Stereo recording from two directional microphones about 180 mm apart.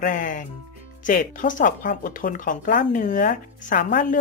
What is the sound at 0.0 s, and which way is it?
Speech, 50° left (ahead or behind).